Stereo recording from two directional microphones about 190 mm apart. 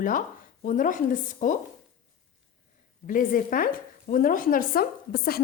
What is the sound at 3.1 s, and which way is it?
Speech, 45° left (ahead or behind).